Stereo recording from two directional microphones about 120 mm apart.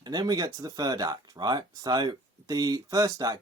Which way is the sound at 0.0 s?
35° right (ahead or behind).